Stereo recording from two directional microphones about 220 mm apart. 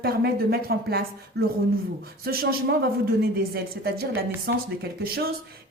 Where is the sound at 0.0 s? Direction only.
45° right (ahead or behind).